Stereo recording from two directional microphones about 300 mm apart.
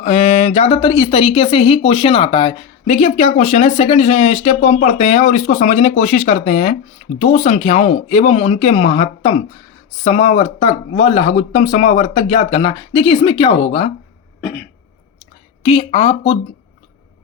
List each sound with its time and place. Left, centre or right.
0.0 s speech: left
15.6 s speech: centre